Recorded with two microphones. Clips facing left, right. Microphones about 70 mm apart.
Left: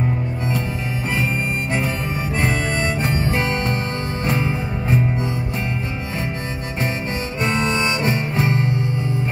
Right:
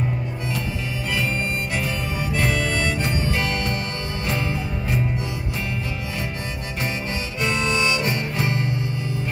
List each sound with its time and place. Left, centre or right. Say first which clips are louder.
2.3 s harmonica: left 1 dB; left
4.3 s music: left 3 dB; left
7.3 s harmonica: left 2 dB; left